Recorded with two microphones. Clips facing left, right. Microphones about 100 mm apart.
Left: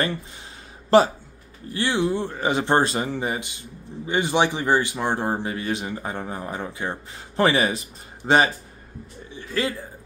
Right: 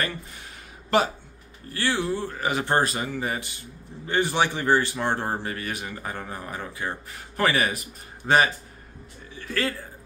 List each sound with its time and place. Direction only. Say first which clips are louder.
0.8 s speech: left 6 dB; 35° left (ahead or behind)
1.7 s speech: left 3 dB; 20° left (ahead or behind)
3.3 s speech: left 2 dB; 20° left (ahead or behind)